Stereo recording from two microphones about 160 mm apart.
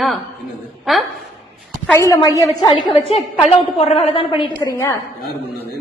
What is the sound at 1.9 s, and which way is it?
A woman's voice, 20° left (ahead or behind).